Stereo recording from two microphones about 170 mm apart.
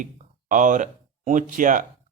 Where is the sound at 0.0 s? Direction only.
50° right (ahead or behind).